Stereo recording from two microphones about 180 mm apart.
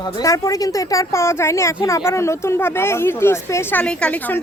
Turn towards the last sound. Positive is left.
turn(degrees=10)  # may be behind; listen again after turning